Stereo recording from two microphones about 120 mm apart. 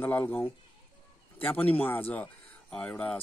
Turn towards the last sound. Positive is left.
turn(degrees=10)  # may be behind; listen again after turning